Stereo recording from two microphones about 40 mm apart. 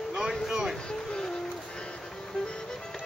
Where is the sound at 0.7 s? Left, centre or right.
Left.